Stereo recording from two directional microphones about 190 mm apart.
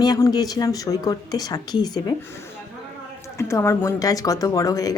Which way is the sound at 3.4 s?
15° left (ahead or behind).